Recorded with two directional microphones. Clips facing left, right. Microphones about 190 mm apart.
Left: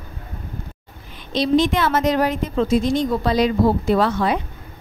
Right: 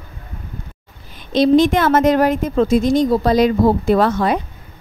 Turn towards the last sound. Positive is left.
turn(degrees=-45)  # may be behind; listen again after turning